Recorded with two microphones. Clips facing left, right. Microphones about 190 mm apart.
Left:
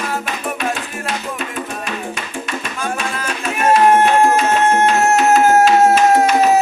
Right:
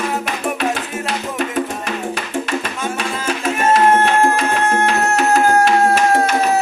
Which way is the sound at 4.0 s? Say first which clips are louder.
Left 2 dB; 20° left (ahead or behind).